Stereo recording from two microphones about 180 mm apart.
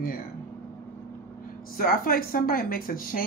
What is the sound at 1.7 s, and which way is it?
Speech, 55° left (ahead or behind).